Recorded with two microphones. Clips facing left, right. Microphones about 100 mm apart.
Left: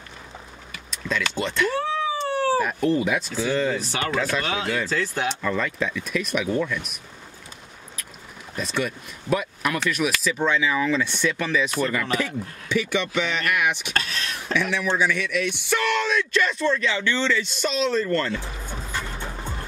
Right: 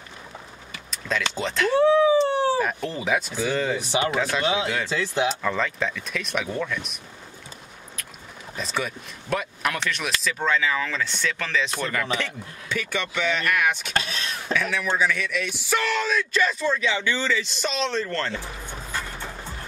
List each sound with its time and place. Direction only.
1.0 s speech: centre (ahead or behind)
1.8 s howl: 20° right (ahead or behind)
2.6 s speech: centre (ahead or behind)
3.4 s speech: 10° right (ahead or behind)
4.8 s speech: 45° left (ahead or behind)
5.4 s speech: 5° left (ahead or behind)
8.5 s speech: centre (ahead or behind)